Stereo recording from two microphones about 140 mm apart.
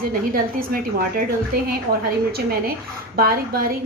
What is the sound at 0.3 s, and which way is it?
Speech, 90° right.